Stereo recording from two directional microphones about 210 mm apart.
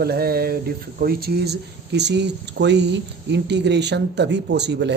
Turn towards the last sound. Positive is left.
turn(degrees=-55)  # may be behind; listen again after turning